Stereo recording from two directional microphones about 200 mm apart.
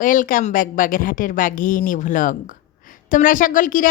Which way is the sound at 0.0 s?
40° left (ahead or behind).